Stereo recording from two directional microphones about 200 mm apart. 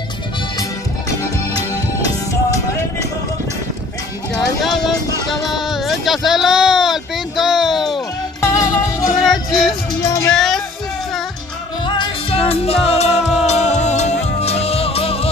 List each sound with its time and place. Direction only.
4.6 s music: centre (ahead or behind)
5.3 s a sound: centre (ahead or behind)
8.4 s music: 15° left (ahead or behind)
9.2 s music: centre (ahead or behind)
11.8 s music: 25° left (ahead or behind)